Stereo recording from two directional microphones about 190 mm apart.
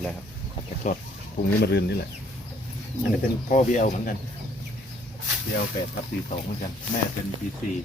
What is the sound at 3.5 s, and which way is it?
Speech, 40° left (ahead or behind).